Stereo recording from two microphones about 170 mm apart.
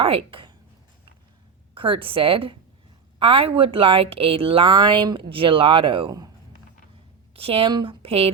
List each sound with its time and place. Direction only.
0.0 s a woman's voice: 30° right (ahead or behind)
1.7 s a woman's voice: 30° right (ahead or behind)
7.3 s a woman's voice: 35° right (ahead or behind)